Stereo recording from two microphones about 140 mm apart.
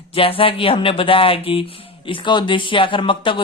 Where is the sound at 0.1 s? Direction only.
40° left (ahead or behind).